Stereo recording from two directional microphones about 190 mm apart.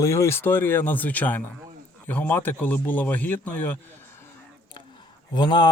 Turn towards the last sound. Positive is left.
turn(degrees=25)  # may be behind; listen again after turning